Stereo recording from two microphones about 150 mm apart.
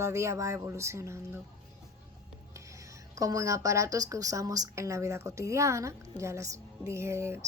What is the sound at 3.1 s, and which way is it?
A woman's voice, 20° right (ahead or behind).